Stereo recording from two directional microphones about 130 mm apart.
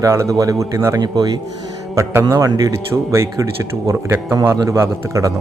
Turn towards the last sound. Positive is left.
turn(degrees=-20)  # may be behind; listen again after turning